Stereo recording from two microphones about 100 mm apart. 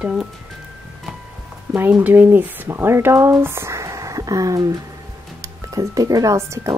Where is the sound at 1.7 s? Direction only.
20° right (ahead or behind).